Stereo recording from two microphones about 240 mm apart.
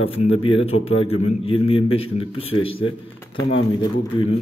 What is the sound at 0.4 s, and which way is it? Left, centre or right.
Speech, left.